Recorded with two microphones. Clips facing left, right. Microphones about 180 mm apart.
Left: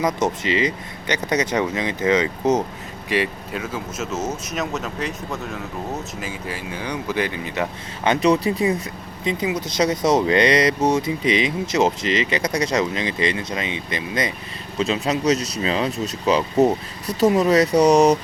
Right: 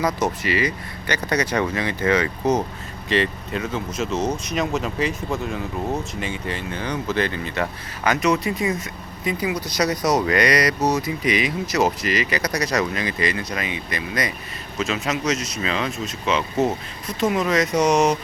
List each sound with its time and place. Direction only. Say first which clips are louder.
0.4 s speech: left 1 dB; 20° left (ahead or behind)
3.1 s speech: right 1 dB; 10° left (ahead or behind)
8.0 s speech: left 3 dB; 30° left (ahead or behind)